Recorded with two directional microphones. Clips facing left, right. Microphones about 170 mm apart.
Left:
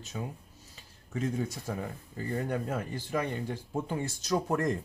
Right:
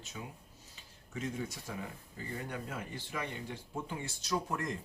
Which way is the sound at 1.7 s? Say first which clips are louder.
Left 6 dB; 45° left (ahead or behind).